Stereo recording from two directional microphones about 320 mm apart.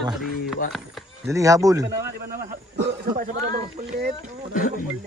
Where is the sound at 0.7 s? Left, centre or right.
Centre.